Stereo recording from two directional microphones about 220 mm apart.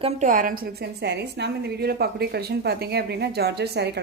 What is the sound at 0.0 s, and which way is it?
A woman's voice, 35° right (ahead or behind).